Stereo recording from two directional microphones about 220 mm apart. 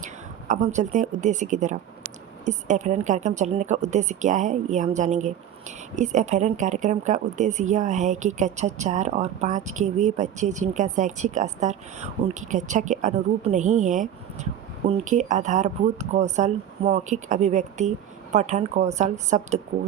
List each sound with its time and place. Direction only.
0.0 s speech: 35° right (ahead or behind)